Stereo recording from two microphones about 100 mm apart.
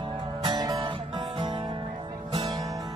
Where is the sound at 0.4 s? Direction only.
40° right (ahead or behind).